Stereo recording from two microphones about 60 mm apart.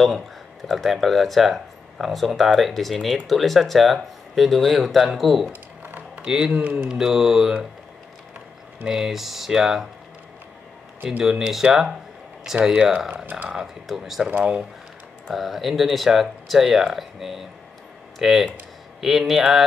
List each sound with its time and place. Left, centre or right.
0.7 s speech: centre
5.5 s a sound: right
6.2 s mantra: centre
6.5 s speech: right
6.9 s mantra: centre
8.8 s speech: centre
11.2 s speech: centre
12.6 s mantra: centre
13.1 s speech: right
13.5 s speech: centre
15.3 s speech: centre